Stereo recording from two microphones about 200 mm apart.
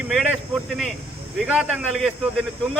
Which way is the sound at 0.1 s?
Centre (ahead or behind).